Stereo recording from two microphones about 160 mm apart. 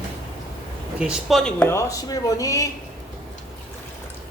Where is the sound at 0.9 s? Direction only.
5° right (ahead or behind); by 2.6 s 20° left (ahead or behind).